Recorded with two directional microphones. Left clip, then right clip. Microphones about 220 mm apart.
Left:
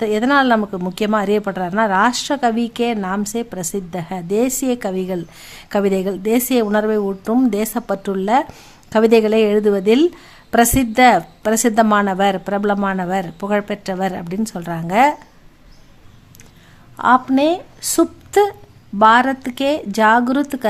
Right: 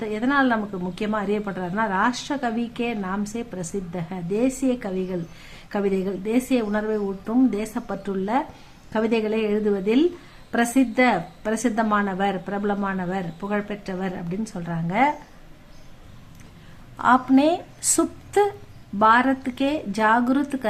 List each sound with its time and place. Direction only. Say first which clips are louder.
0.0 s a woman's voice: left 7 dB; 45° left (ahead or behind)
17.0 s speech: left 4 dB; 30° left (ahead or behind)